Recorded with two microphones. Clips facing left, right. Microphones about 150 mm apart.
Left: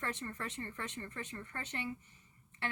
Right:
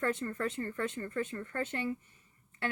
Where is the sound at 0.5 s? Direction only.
45° right (ahead or behind).